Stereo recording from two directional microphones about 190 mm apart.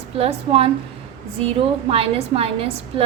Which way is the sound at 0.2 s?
30° right (ahead or behind).